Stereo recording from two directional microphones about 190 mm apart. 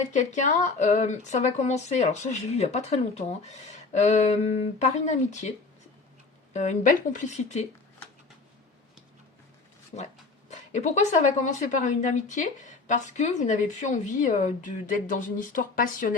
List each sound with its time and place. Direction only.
0.1 s speech: 40° left (ahead or behind)
10.5 s speech: 40° left (ahead or behind)